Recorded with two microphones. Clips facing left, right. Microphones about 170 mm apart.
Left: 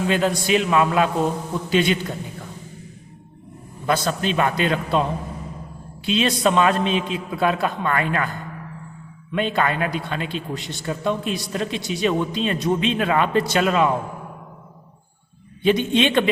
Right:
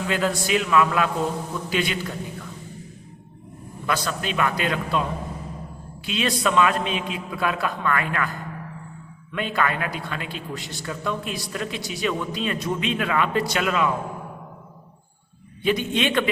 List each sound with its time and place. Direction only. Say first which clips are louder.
0.0 s a man's voice: left 3 dB; 25° left (ahead or behind)
3.8 s a man's voice: left 5 dB; 30° left (ahead or behind)
6.1 s a man's voice: left 4 dB; 25° left (ahead or behind)
9.3 s a man's voice: left 3 dB; 25° left (ahead or behind)
15.6 s a man's voice: left 4 dB; 25° left (ahead or behind)